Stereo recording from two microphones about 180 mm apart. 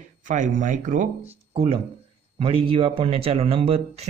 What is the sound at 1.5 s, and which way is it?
Speech, 30° right (ahead or behind).